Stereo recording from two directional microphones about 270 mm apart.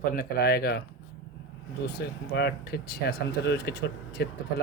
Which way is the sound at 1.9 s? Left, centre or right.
Left.